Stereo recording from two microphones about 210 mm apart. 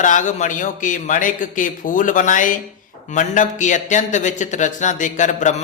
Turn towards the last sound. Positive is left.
turn(degrees=35)  # may be behind; listen again after turning